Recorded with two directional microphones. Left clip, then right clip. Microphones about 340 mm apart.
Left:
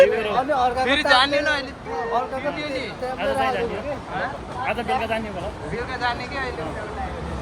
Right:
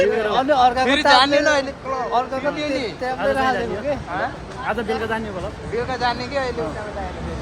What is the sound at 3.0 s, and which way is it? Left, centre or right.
Speech, right.